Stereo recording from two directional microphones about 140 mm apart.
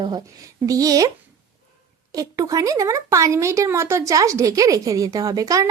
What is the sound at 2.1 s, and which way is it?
Speech, 25° right (ahead or behind).